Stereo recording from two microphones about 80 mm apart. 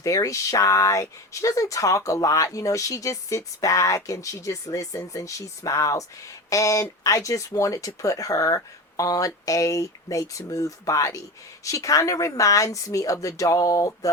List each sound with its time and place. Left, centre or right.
0.0 s speech: left